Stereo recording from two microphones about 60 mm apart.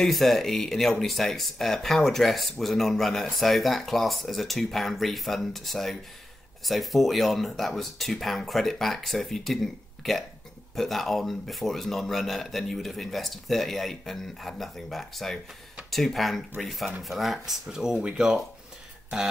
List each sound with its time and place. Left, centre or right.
0.0 s speech: centre